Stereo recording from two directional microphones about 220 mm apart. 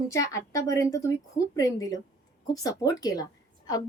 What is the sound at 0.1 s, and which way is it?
A woman's voice, 15° left (ahead or behind).